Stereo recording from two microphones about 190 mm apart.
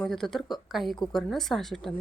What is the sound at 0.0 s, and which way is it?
Speech, centre (ahead or behind).